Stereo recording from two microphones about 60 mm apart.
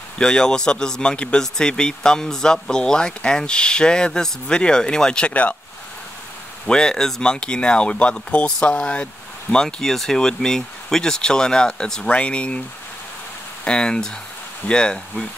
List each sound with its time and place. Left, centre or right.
0.2 s speech: centre
6.6 s speech: centre
13.7 s speech: centre